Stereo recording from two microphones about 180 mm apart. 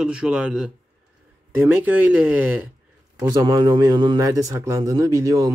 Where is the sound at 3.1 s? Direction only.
20° right (ahead or behind).